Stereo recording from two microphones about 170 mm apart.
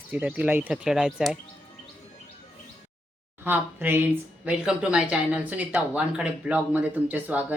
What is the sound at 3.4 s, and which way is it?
Speech, 10° right (ahead or behind).